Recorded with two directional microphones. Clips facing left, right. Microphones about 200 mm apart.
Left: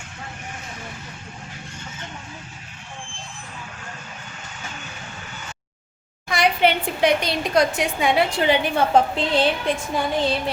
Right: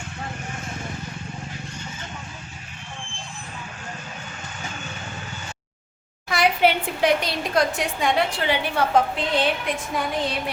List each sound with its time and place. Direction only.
6.2 s a woman's voice: 5° right (ahead or behind)
8.4 s a woman's voice: 20° left (ahead or behind)